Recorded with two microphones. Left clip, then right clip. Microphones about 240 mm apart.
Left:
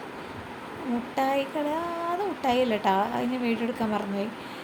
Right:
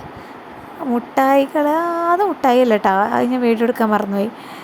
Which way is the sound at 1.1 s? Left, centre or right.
Right.